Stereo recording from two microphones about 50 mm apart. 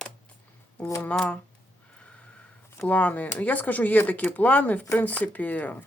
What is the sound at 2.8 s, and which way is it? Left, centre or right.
Speech, left.